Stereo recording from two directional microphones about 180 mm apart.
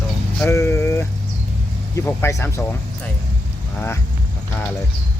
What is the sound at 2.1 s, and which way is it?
Speech, 15° left (ahead or behind).